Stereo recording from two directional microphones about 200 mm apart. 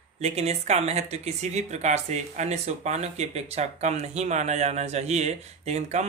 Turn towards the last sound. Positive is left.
turn(degrees=-35)  # may be behind; listen again after turning